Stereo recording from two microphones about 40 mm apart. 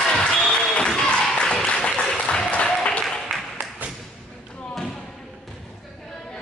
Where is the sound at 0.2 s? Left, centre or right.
Left.